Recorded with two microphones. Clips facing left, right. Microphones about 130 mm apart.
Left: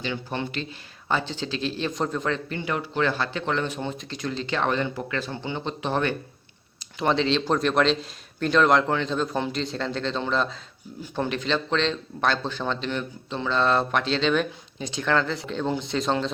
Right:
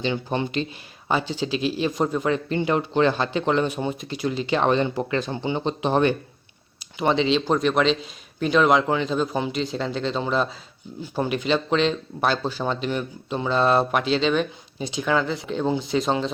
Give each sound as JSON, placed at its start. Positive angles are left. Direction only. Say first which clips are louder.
{"t": 0.0, "sound": "speech", "louder": "right 5 dB", "side_deg": -20}
{"t": 2.5, "sound": "speech", "louder": "right 6 dB", "side_deg": -25}
{"t": 7.0, "sound": "speech", "louder": "right 2 dB", "side_deg": 0}